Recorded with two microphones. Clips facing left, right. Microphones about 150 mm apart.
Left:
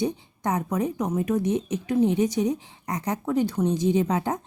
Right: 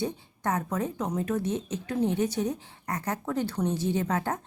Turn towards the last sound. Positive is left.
turn(degrees=15)  # may be behind; listen again after turning